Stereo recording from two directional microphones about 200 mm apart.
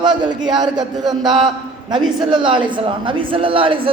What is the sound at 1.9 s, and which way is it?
A woman's voice, 20° right (ahead or behind).